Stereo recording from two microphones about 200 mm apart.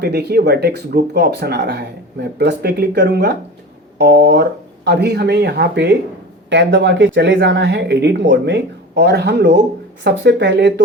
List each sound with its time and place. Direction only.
0.0 s speech: 55° right (ahead or behind)